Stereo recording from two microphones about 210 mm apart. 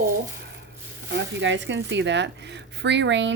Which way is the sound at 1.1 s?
60° right (ahead or behind).